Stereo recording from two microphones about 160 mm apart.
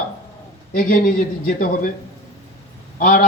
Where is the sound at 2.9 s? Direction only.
55° left (ahead or behind).